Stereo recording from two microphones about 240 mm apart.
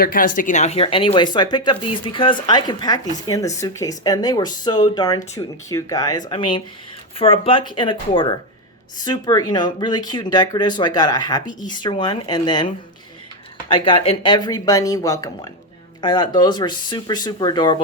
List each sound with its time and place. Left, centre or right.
0.0 s speech: left; by 17.7 s centre